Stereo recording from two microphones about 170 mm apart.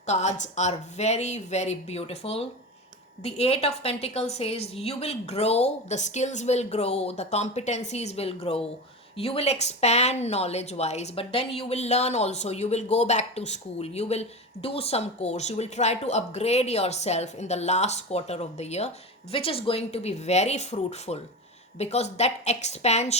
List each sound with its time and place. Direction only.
0.0 s speech: 40° left (ahead or behind)